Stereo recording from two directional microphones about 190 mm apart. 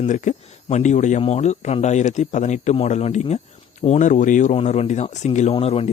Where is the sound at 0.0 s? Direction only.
40° left (ahead or behind).